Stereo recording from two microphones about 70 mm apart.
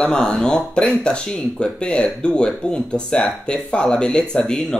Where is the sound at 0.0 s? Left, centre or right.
Centre.